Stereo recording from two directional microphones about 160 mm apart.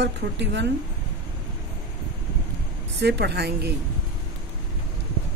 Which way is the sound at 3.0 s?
90° right.